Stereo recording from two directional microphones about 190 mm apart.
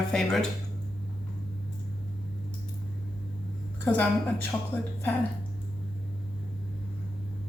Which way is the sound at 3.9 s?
10° left (ahead or behind).